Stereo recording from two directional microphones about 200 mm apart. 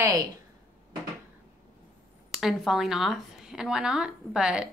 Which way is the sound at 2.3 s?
Centre (ahead or behind).